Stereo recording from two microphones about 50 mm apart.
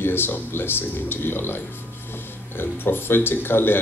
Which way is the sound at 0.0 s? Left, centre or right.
Left.